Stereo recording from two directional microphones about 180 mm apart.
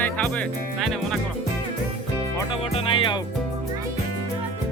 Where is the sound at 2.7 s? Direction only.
30° left (ahead or behind).